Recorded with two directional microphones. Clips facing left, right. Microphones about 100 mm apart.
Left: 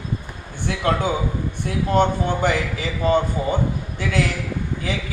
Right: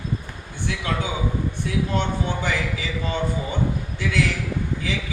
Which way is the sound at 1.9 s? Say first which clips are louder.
Left 10 dB; 45° left (ahead or behind).